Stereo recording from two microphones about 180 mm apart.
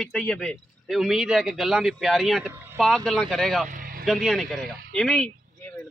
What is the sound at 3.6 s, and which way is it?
Vehicle, 50° right (ahead or behind).